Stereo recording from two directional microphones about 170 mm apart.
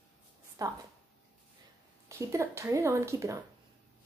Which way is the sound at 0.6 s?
20° right (ahead or behind).